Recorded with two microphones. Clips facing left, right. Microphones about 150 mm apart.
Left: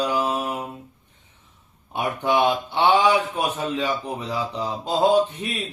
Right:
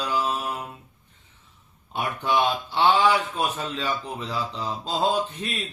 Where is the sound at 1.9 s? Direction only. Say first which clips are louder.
Left 3 dB; 15° left (ahead or behind).